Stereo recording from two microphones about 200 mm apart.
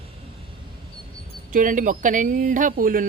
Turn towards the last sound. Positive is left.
turn(degrees=-45)  # may be behind; listen again after turning